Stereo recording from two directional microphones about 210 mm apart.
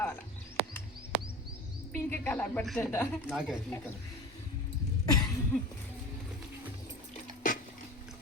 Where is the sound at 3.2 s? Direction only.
5° right (ahead or behind).